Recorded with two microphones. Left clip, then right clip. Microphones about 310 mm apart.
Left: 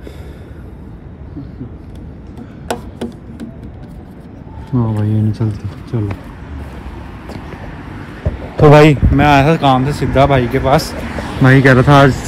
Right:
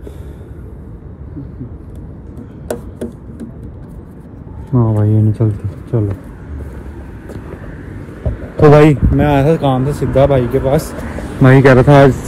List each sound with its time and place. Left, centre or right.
2.3 s tick-tock: centre
4.6 s speech: centre
7.2 s vehicle: centre
8.6 s speech: left
8.9 s speech: centre